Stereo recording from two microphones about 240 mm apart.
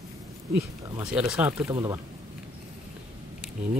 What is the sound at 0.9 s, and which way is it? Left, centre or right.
Speech, centre.